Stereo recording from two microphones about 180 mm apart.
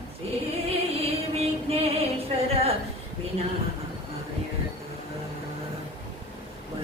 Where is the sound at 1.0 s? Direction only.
35° right (ahead or behind).